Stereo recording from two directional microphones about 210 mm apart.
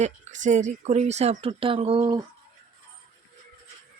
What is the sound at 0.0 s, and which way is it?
Speech, 35° right (ahead or behind).